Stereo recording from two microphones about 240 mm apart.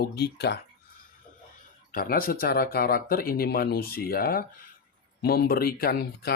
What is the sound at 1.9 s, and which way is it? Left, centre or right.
Speech, left.